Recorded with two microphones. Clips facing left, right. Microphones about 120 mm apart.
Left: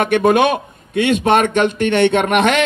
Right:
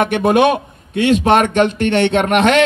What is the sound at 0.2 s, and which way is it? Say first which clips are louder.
Speech: right 1 dB; 30° right (ahead or behind).